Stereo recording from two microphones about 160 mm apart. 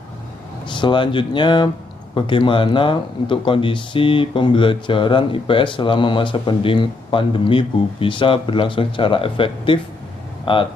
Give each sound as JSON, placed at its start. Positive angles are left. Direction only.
{"t": 0.7, "sound": "speech", "side_deg": 30}